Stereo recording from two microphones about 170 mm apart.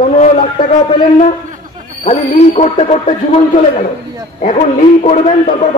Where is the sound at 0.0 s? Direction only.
45° left (ahead or behind).